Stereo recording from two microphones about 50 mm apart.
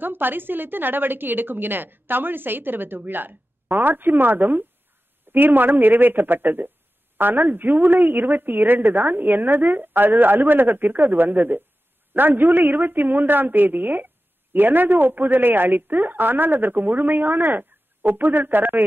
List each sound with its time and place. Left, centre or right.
0.0 s a woman's voice: right